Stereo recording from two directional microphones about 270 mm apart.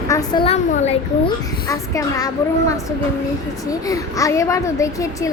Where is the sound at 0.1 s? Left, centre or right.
Centre.